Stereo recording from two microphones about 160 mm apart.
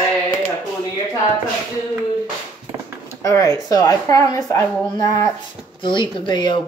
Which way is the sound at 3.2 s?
20° left (ahead or behind).